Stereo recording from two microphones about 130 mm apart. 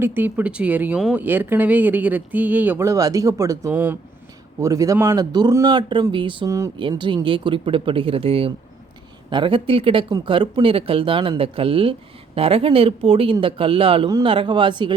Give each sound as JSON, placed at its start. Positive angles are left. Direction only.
{"t": 0.0, "sound": "speech", "side_deg": -15}